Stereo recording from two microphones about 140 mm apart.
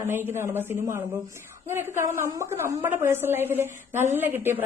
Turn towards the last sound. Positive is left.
turn(degrees=-15)  # may be behind; listen again after turning